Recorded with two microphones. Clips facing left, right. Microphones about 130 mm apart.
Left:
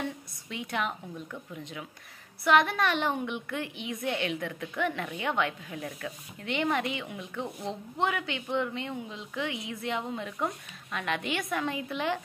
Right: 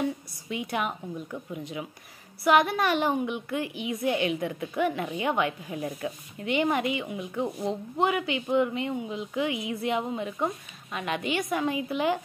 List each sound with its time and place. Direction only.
0.0 s a sound: 10° right (ahead or behind)
1.3 s a woman's voice: 10° right (ahead or behind)
5.8 s speech: 20° right (ahead or behind)
6.4 s a woman's voice: 10° right (ahead or behind)